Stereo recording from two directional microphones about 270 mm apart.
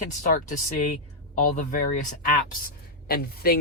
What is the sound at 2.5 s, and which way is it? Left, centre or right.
A woman's voice, left.